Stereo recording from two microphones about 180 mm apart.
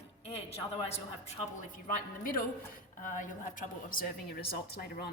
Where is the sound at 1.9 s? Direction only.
50° left (ahead or behind).